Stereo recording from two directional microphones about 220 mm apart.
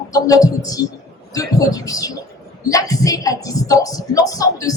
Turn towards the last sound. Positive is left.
turn(degrees=15)  # may be behind; listen again after turning